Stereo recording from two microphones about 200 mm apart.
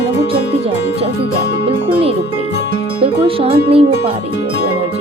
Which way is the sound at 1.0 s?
30° right (ahead or behind).